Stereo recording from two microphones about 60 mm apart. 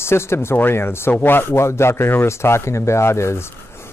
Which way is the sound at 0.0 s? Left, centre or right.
Left.